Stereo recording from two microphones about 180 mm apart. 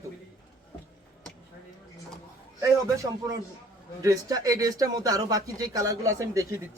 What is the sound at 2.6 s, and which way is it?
Speech, 20° right (ahead or behind).